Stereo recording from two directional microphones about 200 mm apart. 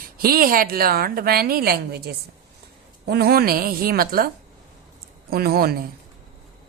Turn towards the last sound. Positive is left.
turn(degrees=-50)  # may be behind; listen again after turning